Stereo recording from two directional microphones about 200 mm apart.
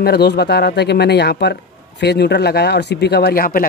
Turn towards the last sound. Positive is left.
turn(degrees=50)  # may be behind; listen again after turning